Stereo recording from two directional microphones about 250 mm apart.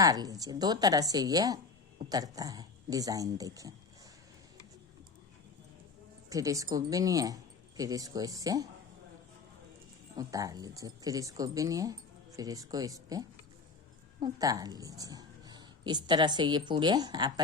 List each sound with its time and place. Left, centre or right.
0.0 s speech: centre
6.3 s speech: centre
10.2 s speech: centre